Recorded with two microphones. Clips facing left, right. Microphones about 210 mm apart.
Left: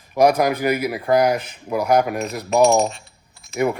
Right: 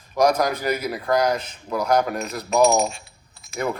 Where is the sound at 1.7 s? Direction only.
10° left (ahead or behind).